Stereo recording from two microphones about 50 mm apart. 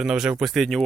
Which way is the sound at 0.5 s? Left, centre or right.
Centre.